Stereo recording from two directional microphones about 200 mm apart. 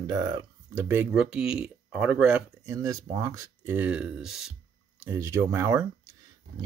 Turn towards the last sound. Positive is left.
turn(degrees=-15)  # may be behind; listen again after turning